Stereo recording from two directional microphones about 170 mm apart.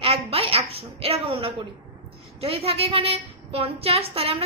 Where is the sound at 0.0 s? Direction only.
35° right (ahead or behind).